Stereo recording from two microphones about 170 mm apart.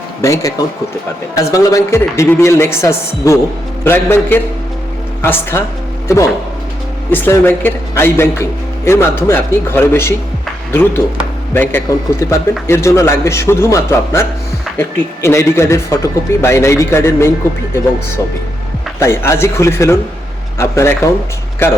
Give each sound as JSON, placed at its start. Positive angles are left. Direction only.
{"t": 0.2, "sound": "a man's voice", "side_deg": 20}
{"t": 7.1, "sound": "a man's voice", "side_deg": 10}
{"t": 18.9, "sound": "a man's voice", "side_deg": 15}